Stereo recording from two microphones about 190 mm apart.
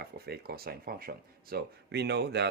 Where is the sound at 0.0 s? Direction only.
55° right (ahead or behind).